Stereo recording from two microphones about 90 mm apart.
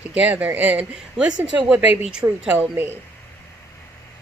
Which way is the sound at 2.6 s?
25° right (ahead or behind).